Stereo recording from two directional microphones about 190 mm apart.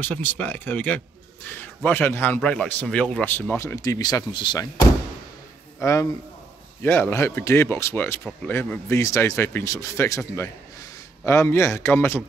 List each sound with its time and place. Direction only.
0.0 s a man's voice: 10° left (ahead or behind)
5.8 s a man's voice: 15° left (ahead or behind)